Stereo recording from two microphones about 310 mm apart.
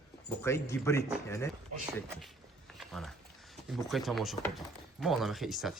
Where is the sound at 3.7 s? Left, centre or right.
Centre.